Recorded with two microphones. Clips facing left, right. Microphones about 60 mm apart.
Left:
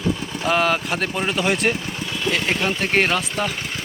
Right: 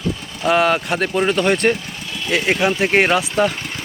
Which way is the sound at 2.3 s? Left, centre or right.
Centre.